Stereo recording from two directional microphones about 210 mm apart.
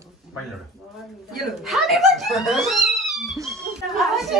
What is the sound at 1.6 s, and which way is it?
A woman's voice, centre (ahead or behind).